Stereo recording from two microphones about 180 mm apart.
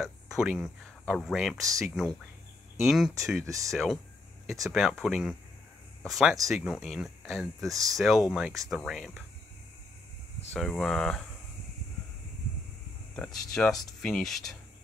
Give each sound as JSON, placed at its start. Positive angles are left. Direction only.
{"t": 0.0, "sound": "speech", "side_deg": 0}
{"t": 3.4, "sound": "speech", "side_deg": -20}
{"t": 3.7, "sound": "speech", "side_deg": 0}
{"t": 7.7, "sound": "speech", "side_deg": -20}
{"t": 8.0, "sound": "speech", "side_deg": 0}
{"t": 10.5, "sound": "speech", "side_deg": 0}
{"t": 13.1, "sound": "speech", "side_deg": 10}